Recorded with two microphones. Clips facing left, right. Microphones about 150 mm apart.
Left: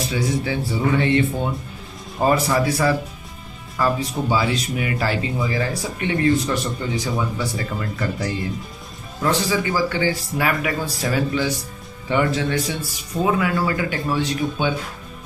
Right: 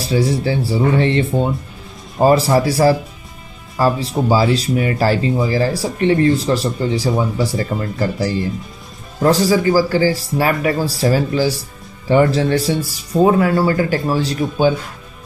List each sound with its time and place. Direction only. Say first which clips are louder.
0.0 s speech: right 6 dB; 30° right (ahead or behind)